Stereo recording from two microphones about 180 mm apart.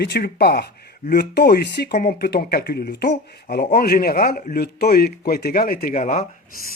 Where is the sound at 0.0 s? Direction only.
65° left (ahead or behind).